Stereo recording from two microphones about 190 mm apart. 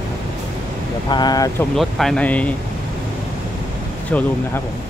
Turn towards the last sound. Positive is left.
turn(degrees=5)  # may be behind; listen again after turning